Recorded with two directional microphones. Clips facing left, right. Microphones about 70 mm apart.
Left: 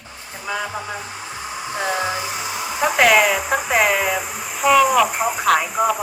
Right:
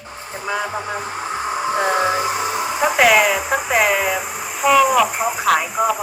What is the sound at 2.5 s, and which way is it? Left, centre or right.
Hair dryer, right.